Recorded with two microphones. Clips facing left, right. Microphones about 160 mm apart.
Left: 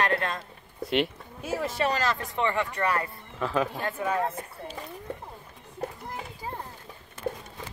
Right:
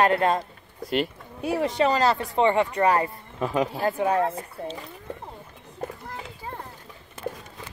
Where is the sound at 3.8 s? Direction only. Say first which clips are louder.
Right 5 dB; 30° right (ahead or behind).